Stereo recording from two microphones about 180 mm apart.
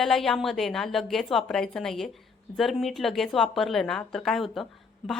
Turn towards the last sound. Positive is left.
turn(degrees=0)  # may be behind; listen again after turning